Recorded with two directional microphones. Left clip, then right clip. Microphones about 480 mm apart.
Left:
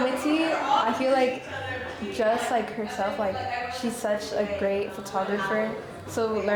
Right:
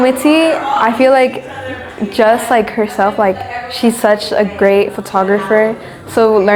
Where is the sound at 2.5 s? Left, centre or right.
Right.